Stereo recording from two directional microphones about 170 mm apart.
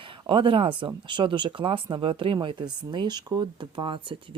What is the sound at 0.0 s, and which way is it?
Speech, 30° right (ahead or behind).